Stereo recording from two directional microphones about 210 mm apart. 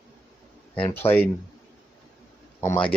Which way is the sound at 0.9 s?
10° left (ahead or behind).